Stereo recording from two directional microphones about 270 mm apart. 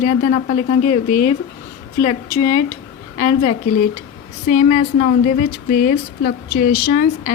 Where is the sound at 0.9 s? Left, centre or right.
Left.